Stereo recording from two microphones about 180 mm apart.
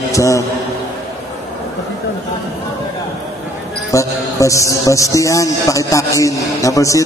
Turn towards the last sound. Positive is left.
turn(degrees=15)  # may be behind; listen again after turning